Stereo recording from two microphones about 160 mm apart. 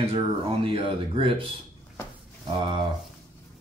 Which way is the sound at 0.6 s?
35° right (ahead or behind).